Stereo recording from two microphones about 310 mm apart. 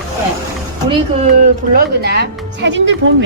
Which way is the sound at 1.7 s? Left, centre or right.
Right.